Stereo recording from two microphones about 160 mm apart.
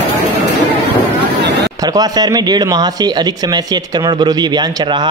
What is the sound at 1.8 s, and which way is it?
Speech, 25° right (ahead or behind).